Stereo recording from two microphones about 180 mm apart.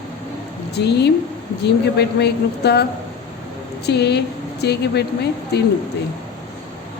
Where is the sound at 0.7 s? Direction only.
65° left (ahead or behind).